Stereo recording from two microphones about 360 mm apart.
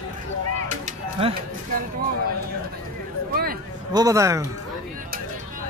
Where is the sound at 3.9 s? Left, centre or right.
Centre.